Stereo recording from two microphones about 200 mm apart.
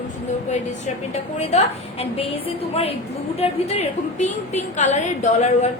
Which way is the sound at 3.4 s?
30° left (ahead or behind).